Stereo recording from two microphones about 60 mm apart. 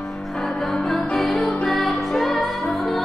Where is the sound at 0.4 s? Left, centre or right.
Centre.